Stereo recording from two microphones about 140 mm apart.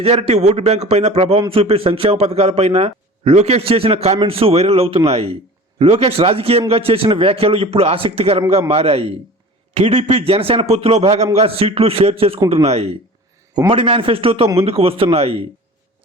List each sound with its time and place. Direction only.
0.0 s a man's voice: 45° right (ahead or behind)